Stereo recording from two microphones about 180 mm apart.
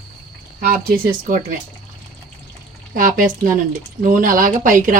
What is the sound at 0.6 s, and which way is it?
Speech, 60° right (ahead or behind).